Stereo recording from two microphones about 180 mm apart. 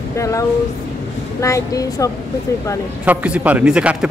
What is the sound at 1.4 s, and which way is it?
Speech, 15° left (ahead or behind).